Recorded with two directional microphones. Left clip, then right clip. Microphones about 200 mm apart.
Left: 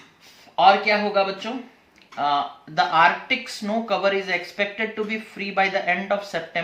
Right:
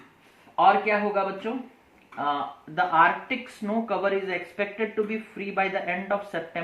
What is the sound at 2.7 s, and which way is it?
Speech, 20° left (ahead or behind).